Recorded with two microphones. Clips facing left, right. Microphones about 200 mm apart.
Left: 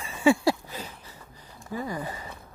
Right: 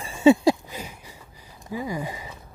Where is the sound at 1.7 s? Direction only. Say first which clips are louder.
Right 2 dB; 10° right (ahead or behind).